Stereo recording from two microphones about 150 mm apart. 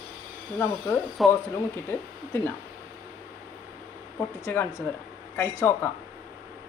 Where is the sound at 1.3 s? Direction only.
15° left (ahead or behind).